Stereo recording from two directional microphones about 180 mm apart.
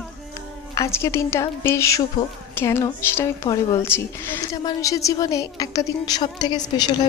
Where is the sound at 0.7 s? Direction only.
15° left (ahead or behind).